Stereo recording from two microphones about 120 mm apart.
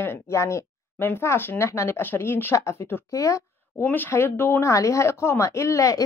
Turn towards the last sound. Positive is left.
turn(degrees=25)  # may be behind; listen again after turning